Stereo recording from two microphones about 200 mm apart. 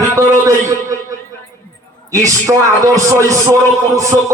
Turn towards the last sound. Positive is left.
turn(degrees=-15)  # may be behind; listen again after turning